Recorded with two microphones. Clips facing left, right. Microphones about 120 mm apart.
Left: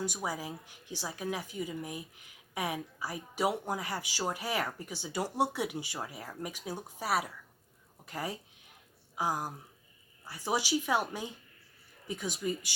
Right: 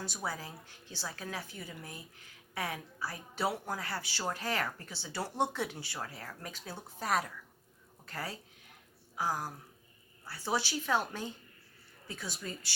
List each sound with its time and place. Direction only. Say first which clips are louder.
0.0 s a woman's voice: left 4 dB; 15° left (ahead or behind)